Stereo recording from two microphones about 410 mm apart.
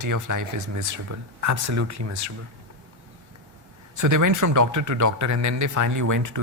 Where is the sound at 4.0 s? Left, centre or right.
Right.